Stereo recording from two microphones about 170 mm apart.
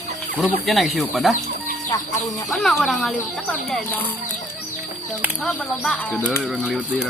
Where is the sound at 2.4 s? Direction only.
Centre (ahead or behind).